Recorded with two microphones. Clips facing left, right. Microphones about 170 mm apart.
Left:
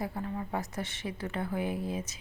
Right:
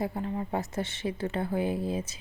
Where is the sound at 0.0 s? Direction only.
25° right (ahead or behind).